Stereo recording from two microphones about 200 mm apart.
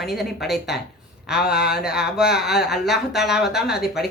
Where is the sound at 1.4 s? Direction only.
50° left (ahead or behind).